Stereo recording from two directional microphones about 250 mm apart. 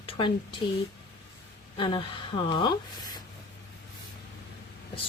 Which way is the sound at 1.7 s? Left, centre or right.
Centre.